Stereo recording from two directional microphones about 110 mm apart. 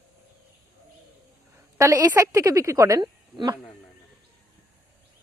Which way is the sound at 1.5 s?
30° right (ahead or behind).